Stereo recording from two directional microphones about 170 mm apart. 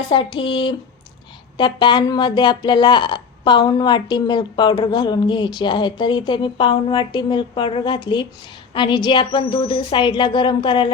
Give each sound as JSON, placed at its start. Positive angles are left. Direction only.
{"t": 0.3, "sound": "speech", "side_deg": 30}